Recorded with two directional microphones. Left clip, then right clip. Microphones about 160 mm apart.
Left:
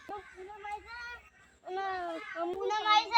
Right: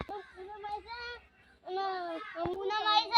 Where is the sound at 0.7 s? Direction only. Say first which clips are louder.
Right 1 dB; 15° left (ahead or behind).